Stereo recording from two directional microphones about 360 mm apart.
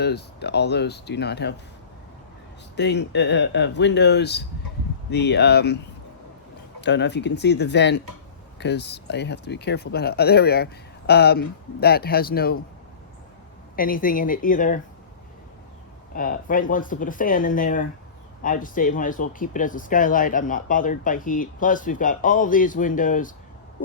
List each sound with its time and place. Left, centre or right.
0.0 s speech: left
2.7 s speech: left
6.8 s speech: left
13.7 s speech: left
16.1 s speech: left